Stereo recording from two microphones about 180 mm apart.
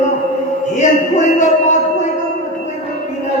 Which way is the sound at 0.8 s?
40° left (ahead or behind).